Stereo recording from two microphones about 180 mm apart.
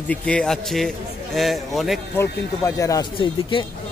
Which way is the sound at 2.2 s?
15° left (ahead or behind).